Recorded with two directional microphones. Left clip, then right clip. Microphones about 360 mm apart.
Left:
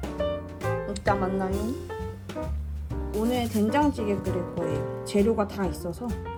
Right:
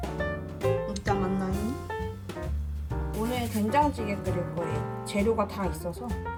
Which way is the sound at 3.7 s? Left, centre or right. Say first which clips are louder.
Right 1 dB; centre.